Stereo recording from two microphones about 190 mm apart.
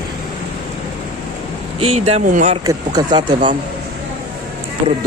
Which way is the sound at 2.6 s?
20° right (ahead or behind).